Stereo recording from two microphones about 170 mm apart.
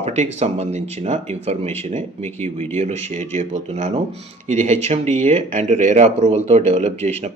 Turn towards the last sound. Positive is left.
turn(degrees=-40)  # may be behind; listen again after turning